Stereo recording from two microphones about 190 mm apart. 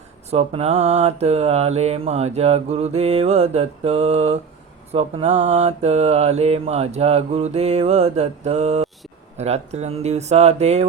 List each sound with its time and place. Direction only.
0.3 s mantra: 35° right (ahead or behind)